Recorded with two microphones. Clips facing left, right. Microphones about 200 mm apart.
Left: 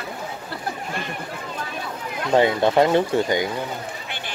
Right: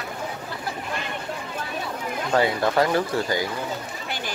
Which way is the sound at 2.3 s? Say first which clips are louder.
Left 4 dB; 25° left (ahead or behind).